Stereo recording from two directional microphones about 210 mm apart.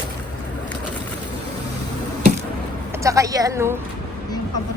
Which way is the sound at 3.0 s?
15° right (ahead or behind).